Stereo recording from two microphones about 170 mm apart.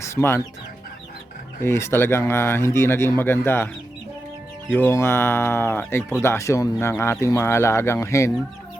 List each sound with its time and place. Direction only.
0.0 s speech: 15° left (ahead or behind)
1.6 s speech: 15° left (ahead or behind)
4.7 s speech: 15° left (ahead or behind)